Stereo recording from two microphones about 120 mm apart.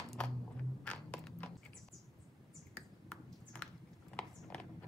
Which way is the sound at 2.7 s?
10° left (ahead or behind).